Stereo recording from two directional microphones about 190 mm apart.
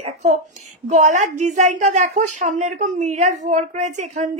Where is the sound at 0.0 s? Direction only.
35° right (ahead or behind).